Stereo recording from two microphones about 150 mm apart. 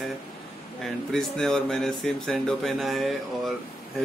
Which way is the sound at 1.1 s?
Centre (ahead or behind).